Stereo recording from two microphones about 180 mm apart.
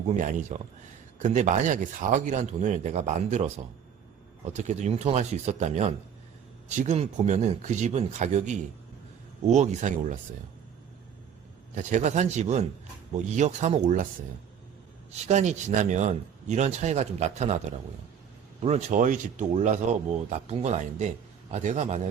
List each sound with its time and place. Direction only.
0.1 s speech: 40° right (ahead or behind)
11.7 s speech: 45° right (ahead or behind)
15.1 s speech: 40° right (ahead or behind)
18.6 s speech: 40° right (ahead or behind)